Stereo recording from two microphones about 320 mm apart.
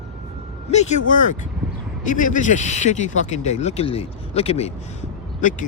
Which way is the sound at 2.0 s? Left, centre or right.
Left.